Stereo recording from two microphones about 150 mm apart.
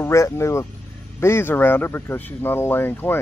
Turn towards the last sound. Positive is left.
turn(degrees=15)  # may be behind; listen again after turning